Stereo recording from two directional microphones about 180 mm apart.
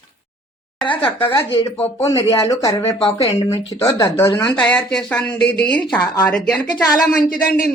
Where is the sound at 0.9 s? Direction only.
30° left (ahead or behind).